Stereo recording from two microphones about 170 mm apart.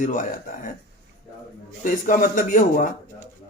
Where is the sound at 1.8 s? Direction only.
50° left (ahead or behind).